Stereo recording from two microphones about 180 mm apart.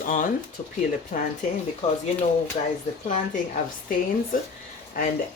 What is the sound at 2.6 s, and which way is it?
Speech, 40° left (ahead or behind).